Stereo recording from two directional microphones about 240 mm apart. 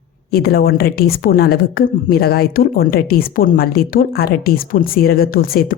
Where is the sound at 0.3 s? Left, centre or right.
Left.